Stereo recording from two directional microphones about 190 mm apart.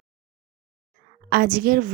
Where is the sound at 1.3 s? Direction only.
50° right (ahead or behind).